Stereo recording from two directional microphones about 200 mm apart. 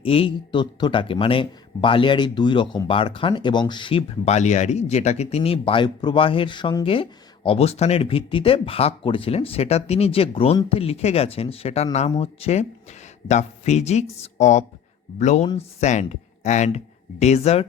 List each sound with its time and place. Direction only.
0.0 s speech: 30° left (ahead or behind)